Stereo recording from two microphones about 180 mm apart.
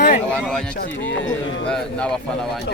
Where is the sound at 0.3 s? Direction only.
5° left (ahead or behind).